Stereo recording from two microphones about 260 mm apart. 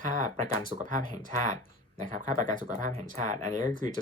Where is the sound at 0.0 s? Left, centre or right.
Right.